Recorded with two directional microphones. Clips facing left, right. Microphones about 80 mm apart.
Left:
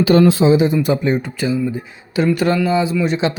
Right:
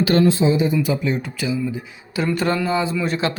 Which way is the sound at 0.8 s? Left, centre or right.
Left.